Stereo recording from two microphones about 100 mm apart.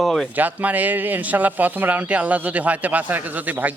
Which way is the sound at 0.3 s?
15° right (ahead or behind).